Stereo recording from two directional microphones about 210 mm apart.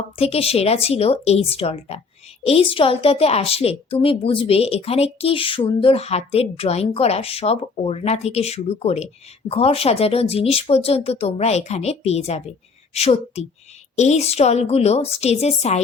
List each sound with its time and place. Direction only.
0.2 s a woman's voice: 30° left (ahead or behind)